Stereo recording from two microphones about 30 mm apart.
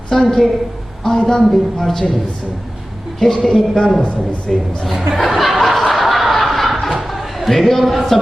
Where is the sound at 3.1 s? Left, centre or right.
Centre.